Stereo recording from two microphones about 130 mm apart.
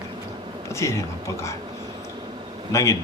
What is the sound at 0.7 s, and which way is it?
Speech, 20° left (ahead or behind).